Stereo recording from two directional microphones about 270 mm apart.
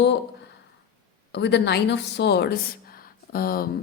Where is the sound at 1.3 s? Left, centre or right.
Left.